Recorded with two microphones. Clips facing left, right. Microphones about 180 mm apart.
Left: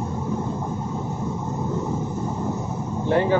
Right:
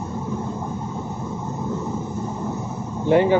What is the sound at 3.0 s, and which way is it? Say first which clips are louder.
Speech: right 4 dB; 15° right (ahead or behind).